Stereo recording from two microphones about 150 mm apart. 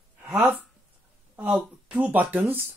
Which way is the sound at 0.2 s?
10° right (ahead or behind).